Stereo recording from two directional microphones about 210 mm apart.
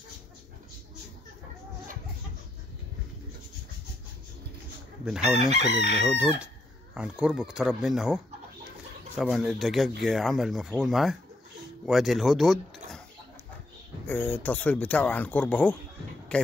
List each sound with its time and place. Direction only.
5.2 s chicken: 30° right (ahead or behind)
6.0 s chicken: 5° right (ahead or behind)
6.4 s speech: 5° right (ahead or behind)
14.0 s speech: 10° left (ahead or behind)